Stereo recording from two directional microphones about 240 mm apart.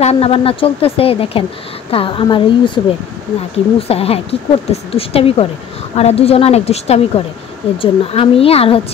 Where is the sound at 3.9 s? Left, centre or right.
Left.